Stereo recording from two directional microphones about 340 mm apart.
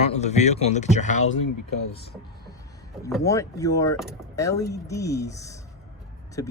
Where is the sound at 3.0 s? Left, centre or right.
Centre.